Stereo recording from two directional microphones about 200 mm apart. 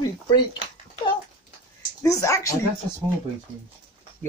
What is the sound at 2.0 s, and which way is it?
Speech, 15° left (ahead or behind).